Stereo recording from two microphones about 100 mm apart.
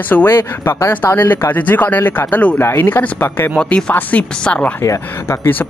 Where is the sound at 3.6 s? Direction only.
10° left (ahead or behind).